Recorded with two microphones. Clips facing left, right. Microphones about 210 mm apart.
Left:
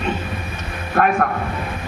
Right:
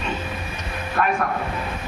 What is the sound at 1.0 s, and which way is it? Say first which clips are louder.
Speech: left 5 dB; 55° left (ahead or behind).